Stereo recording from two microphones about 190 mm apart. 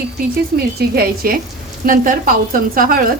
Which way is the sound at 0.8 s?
50° right (ahead or behind).